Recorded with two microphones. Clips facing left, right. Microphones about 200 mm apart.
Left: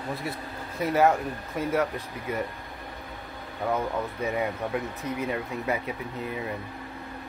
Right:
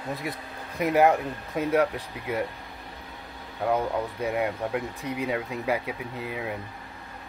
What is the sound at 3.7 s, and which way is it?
Speech, 10° right (ahead or behind).